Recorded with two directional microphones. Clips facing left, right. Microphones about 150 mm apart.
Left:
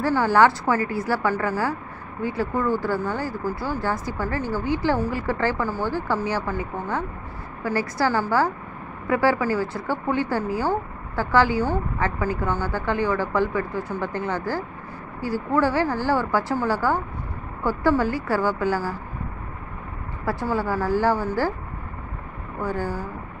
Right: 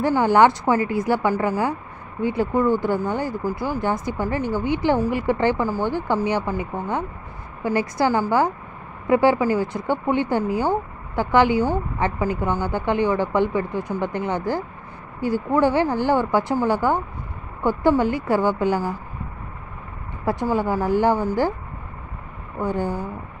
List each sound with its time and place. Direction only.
0.0 s a woman's voice: 20° right (ahead or behind)
20.2 s speech: 20° right (ahead or behind)
22.6 s speech: 20° right (ahead or behind)